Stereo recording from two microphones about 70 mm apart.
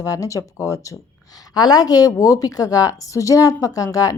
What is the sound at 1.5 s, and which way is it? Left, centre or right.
A woman's voice, left.